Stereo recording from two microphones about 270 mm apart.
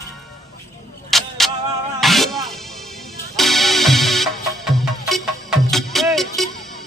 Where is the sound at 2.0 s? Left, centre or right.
Centre.